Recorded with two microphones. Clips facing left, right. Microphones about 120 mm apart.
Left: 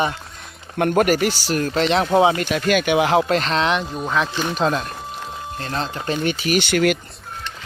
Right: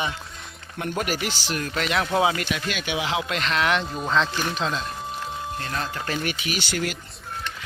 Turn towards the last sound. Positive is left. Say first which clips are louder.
# left 10 dB
turn(degrees=70)  # may be behind; listen again after turning